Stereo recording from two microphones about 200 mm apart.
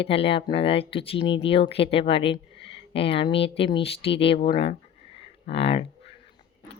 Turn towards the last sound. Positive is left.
turn(degrees=30)  # may be behind; listen again after turning